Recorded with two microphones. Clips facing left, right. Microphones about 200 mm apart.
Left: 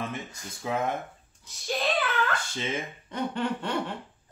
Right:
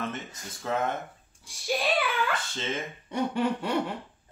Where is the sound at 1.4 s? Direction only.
10° right (ahead or behind).